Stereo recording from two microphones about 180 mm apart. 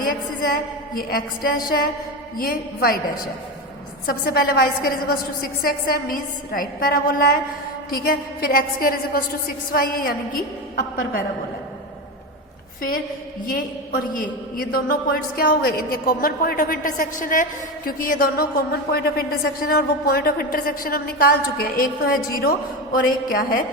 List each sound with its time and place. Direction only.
0.0 s a woman's voice: 55° left (ahead or behind)
13.5 s a man's voice: 50° left (ahead or behind)